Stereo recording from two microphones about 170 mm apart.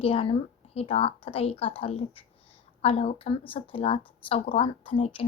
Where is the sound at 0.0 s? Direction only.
35° left (ahead or behind).